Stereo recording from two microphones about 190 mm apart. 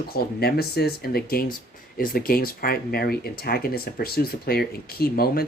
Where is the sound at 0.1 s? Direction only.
55° left (ahead or behind).